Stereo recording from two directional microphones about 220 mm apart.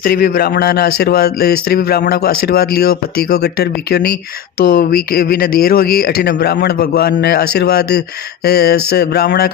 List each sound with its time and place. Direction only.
0.0 s speech: 45° left (ahead or behind)